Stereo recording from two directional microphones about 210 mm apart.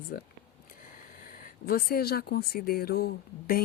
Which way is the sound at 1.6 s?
45° left (ahead or behind).